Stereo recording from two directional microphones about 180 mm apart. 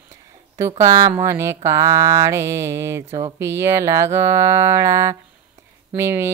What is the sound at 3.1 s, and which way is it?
Speech, 30° right (ahead or behind).